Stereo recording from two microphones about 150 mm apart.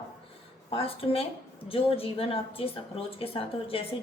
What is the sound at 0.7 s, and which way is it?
A woman's voice, 40° left (ahead or behind).